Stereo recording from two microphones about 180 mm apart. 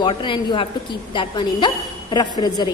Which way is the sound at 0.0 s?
25° left (ahead or behind).